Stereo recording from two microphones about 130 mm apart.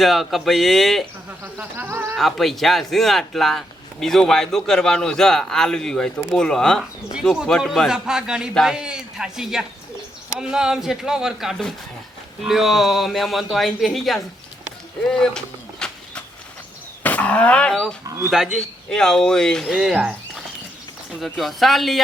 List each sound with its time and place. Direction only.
0.0 s a man's voice: centre (ahead or behind)
1.5 s music: 15° right (ahead or behind)
2.1 s a man's voice: centre (ahead or behind)
15.0 s a sound: 5° left (ahead or behind)
17.0 s speech: 10° left (ahead or behind)
18.0 s speech: 20° right (ahead or behind)
18.3 s a man's voice: 5° right (ahead or behind)